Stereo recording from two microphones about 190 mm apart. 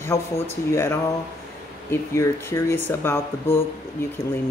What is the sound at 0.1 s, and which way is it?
Speech, 15° left (ahead or behind).